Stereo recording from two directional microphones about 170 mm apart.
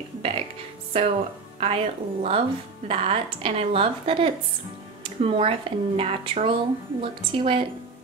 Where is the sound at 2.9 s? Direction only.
35° right (ahead or behind).